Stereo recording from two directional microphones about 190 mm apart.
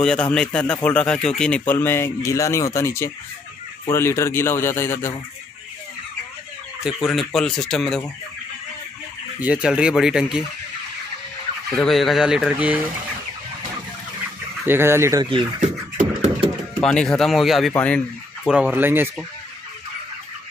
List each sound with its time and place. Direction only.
0.0 s speech: 5° left (ahead or behind)
7.0 s speech: centre (ahead or behind)
9.4 s speech: 5° right (ahead or behind)
11.8 s speech: centre (ahead or behind)
14.7 s speech: 15° right (ahead or behind)
15.2 s speech: 30° right (ahead or behind)
16.0 s beatboxing: 40° right (ahead or behind)
16.8 s speech: 5° left (ahead or behind)